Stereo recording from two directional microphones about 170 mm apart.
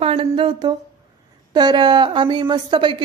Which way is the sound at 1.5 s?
25° right (ahead or behind).